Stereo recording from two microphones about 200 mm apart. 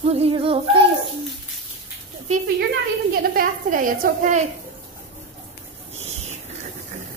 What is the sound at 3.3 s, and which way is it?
A woman's voice, 45° right (ahead or behind).